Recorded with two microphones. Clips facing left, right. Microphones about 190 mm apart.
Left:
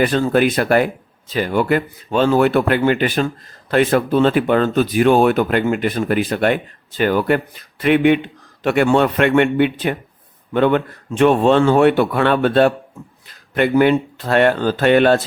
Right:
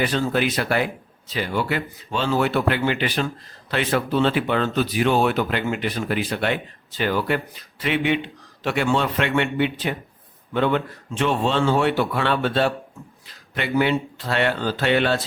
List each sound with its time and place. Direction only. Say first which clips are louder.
0.0 s a man's voice: left 6 dB; 50° left (ahead or behind)